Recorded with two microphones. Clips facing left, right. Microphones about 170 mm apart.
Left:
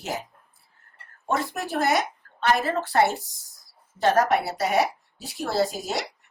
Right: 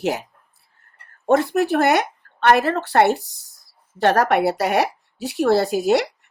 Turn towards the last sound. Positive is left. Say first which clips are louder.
# right 8 dB
turn(degrees=-65)  # may be behind; listen again after turning